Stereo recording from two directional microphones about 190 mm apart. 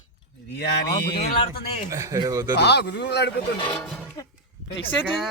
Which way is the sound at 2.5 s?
60° left (ahead or behind).